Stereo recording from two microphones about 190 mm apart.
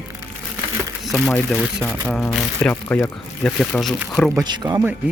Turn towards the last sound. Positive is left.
turn(degrees=-20)  # may be behind; listen again after turning